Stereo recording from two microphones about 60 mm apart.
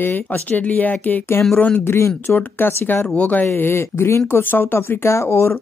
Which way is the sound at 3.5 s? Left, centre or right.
Left.